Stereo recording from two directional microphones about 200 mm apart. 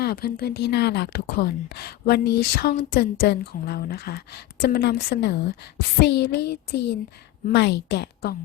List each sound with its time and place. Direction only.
0.0 s a woman's voice: 50° left (ahead or behind)